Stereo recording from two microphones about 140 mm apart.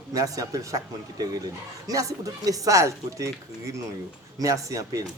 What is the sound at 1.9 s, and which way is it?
Speech, 25° right (ahead or behind).